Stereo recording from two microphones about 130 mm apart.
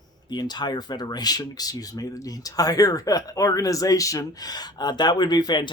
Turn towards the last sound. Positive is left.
turn(degrees=35)  # may be behind; listen again after turning